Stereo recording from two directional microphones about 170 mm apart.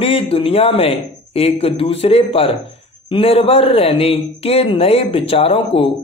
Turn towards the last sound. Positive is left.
turn(degrees=35)  # may be behind; listen again after turning